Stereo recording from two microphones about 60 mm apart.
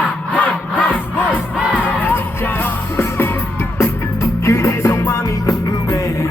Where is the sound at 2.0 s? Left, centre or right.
Left.